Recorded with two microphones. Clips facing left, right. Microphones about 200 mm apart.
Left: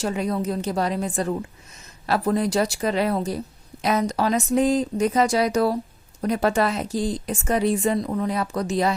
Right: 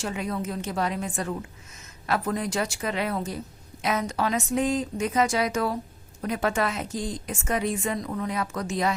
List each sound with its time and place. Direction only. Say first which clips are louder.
0.0 s a woman's voice: left 5 dB; 35° left (ahead or behind)